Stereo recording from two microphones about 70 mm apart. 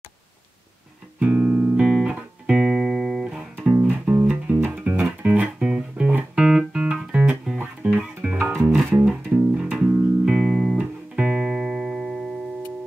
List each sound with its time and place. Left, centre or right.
1.2 s music: centre